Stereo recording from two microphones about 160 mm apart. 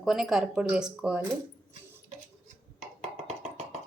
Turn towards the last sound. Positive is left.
turn(degrees=-45)  # may be behind; listen again after turning